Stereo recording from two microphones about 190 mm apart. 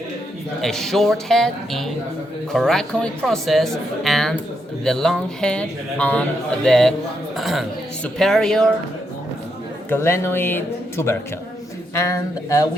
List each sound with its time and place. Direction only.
0.6 s speech: centre (ahead or behind)
9.9 s speech: 15° left (ahead or behind)